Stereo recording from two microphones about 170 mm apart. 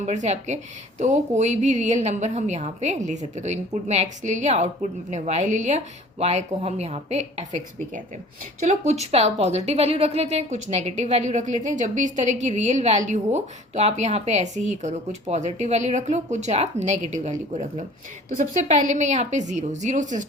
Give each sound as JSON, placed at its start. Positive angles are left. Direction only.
{"t": 0.0, "sound": "a woman's voice", "side_deg": -45}